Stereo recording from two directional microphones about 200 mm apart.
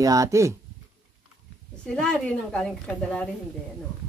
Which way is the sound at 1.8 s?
5° left (ahead or behind).